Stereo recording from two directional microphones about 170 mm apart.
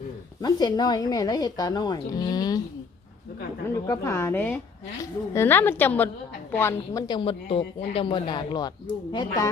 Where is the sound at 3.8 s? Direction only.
15° left (ahead or behind).